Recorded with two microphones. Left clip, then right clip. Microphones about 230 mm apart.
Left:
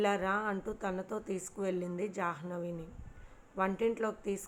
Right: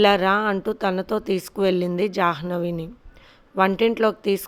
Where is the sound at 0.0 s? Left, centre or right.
Right.